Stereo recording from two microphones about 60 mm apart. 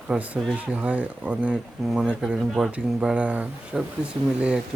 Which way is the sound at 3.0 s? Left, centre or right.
Centre.